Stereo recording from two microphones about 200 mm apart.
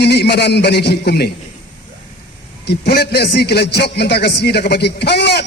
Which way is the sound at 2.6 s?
55° left (ahead or behind).